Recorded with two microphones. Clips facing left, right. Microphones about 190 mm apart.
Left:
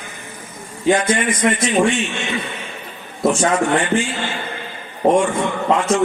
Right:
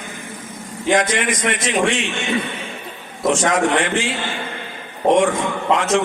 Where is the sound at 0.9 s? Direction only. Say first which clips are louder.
Left 1 dB; 90° right.